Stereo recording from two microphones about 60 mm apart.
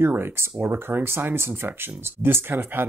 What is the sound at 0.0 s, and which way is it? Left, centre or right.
Speech, right.